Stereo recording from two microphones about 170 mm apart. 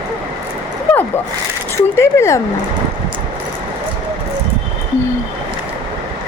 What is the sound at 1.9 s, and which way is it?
Speech, 15° left (ahead or behind).